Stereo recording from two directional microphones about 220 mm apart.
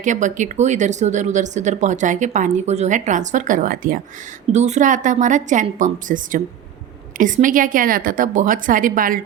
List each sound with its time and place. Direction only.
0.0 s speech: 35° right (ahead or behind)